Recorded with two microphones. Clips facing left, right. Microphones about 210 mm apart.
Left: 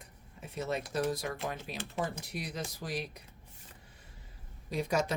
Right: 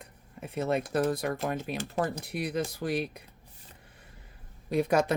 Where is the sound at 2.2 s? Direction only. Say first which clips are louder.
Right 8 dB; 60° right (ahead or behind).